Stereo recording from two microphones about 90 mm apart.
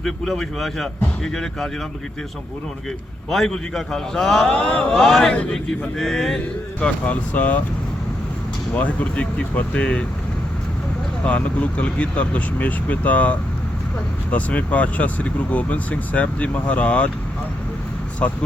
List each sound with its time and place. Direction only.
0.0 s speech: 5° left (ahead or behind)
3.3 s speech: 5° left (ahead or behind)
8.7 s speech: 15° left (ahead or behind)
11.2 s speech: 15° left (ahead or behind)
18.2 s speech: 15° left (ahead or behind)